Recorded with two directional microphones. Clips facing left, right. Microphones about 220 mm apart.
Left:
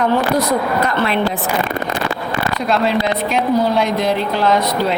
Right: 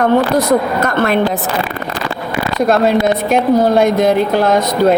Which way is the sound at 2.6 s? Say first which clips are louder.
Right 6 dB; 45° right (ahead or behind).